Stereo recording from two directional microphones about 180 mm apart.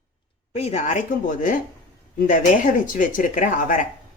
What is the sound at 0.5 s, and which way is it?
Speech, 35° left (ahead or behind).